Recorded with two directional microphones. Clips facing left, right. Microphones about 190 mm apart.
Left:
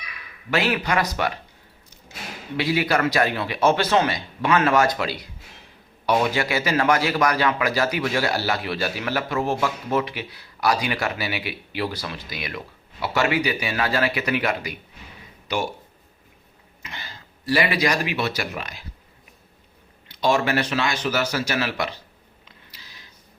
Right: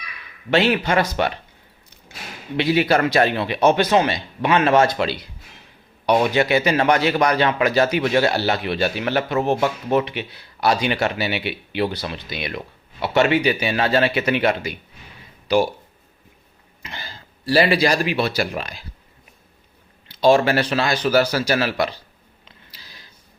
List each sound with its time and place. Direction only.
0.5 s a man's voice: 25° right (ahead or behind)
2.6 s a man's voice: 25° right (ahead or behind)
16.8 s speech: 30° right (ahead or behind)
20.1 s speech: 30° right (ahead or behind)
22.4 s a sound: 35° right (ahead or behind)